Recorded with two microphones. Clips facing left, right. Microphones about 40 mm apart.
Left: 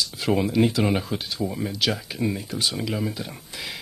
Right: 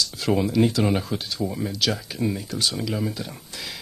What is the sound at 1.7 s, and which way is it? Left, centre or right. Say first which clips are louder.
Speech: even; centre.